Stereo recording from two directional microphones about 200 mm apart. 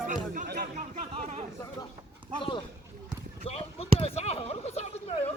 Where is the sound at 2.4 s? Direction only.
25° left (ahead or behind).